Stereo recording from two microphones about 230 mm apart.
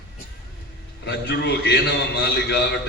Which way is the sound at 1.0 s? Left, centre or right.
Left.